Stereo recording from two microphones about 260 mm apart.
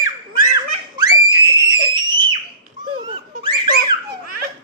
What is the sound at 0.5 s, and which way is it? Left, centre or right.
Screaming, centre.